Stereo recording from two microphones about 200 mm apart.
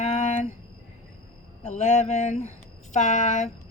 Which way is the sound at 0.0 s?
35° left (ahead or behind).